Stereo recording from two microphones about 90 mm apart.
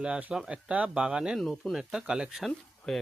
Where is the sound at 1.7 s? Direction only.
5° right (ahead or behind).